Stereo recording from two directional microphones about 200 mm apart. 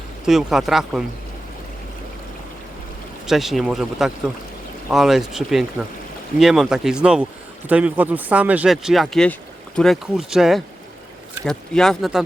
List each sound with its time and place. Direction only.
0.3 s speech: centre (ahead or behind)
3.2 s speech: centre (ahead or behind)